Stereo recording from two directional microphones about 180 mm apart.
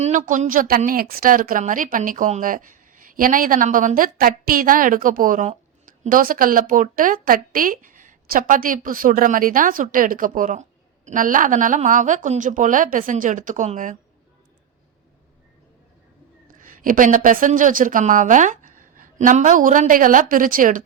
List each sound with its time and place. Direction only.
0.0 s a woman's voice: 45° right (ahead or behind)
16.5 s speech: 50° right (ahead or behind)